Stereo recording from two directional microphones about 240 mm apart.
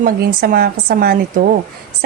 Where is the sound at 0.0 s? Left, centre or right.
Right.